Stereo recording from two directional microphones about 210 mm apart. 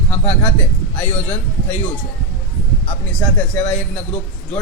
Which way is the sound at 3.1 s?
5° left (ahead or behind).